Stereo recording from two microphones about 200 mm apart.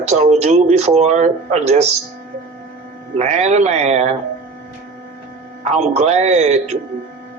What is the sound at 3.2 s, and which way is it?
Speech, 35° right (ahead or behind).